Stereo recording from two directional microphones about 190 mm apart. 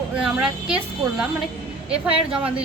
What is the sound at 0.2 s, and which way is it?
A woman's voice, 5° right (ahead or behind).